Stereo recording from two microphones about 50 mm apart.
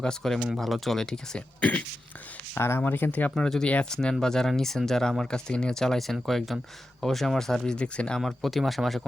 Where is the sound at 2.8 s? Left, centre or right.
Left.